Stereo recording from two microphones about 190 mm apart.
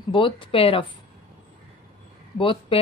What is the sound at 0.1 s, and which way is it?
Speech, 25° left (ahead or behind).